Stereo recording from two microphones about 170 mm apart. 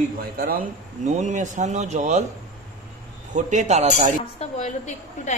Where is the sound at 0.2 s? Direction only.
60° right (ahead or behind).